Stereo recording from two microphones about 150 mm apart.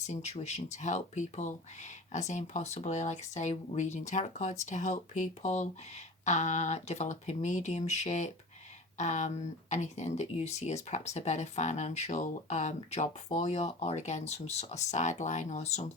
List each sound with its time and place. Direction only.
0.0 s speech: 50° left (ahead or behind)